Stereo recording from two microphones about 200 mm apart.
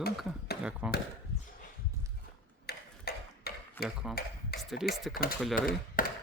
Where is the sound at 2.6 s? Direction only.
50° left (ahead or behind).